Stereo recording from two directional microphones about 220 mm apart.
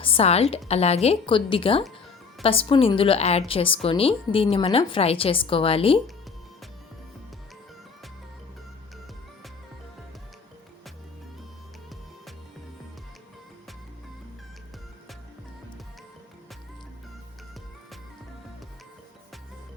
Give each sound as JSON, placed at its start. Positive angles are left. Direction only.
{"t": 0.0, "sound": "a woman's voice", "side_deg": 25}